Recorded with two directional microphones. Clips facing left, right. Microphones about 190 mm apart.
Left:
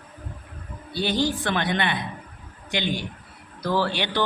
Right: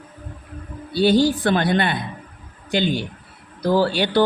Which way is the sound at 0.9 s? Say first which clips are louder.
Right 8 dB; 35° right (ahead or behind).